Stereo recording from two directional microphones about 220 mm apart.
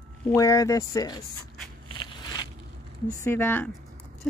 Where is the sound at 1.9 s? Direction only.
20° left (ahead or behind).